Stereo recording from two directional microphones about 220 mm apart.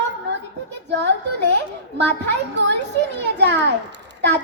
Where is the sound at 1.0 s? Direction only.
50° right (ahead or behind).